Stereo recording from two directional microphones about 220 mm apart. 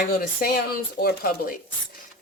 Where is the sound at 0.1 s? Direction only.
40° left (ahead or behind).